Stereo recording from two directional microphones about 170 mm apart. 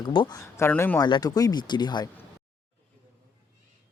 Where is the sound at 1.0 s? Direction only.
25° left (ahead or behind).